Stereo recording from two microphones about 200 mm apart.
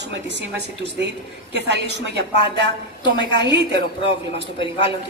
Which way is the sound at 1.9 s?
60° right (ahead or behind).